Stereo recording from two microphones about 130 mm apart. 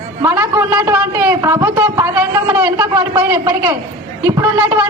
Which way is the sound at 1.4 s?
25° right (ahead or behind).